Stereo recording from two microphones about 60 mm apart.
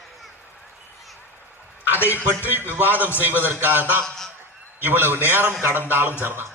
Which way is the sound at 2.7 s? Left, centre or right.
Right.